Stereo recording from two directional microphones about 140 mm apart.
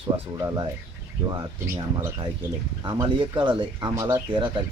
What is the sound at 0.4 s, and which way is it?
Speech, 30° right (ahead or behind).